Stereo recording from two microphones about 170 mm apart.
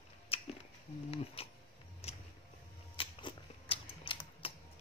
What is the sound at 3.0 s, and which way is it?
Typewriter, 30° left (ahead or behind).